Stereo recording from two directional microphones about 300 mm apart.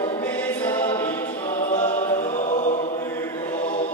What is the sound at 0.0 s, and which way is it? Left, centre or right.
Choir, centre.